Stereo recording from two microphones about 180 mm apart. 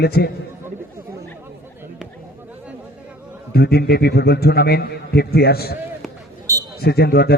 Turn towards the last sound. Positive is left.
turn(degrees=60)  # may be behind; listen again after turning